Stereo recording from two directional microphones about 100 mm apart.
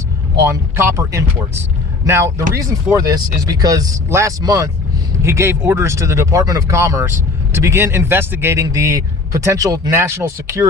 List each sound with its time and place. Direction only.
0.4 s speech: 25° right (ahead or behind)
10.0 s speech: 25° right (ahead or behind)